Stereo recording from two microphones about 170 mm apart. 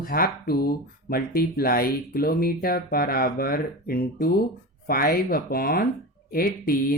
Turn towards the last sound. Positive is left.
turn(degrees=60)  # may be behind; listen again after turning